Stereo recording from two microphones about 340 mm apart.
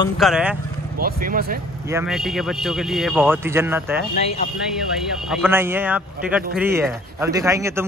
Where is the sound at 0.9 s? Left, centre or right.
Right.